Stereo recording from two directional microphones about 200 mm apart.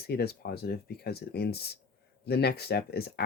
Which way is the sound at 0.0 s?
50° left (ahead or behind).